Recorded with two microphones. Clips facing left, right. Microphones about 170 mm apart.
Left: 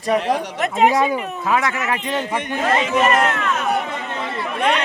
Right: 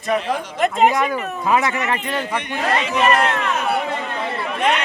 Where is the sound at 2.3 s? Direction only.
45° left (ahead or behind).